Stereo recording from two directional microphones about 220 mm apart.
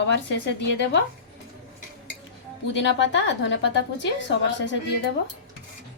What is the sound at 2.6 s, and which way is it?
A woman's voice, 55° left (ahead or behind).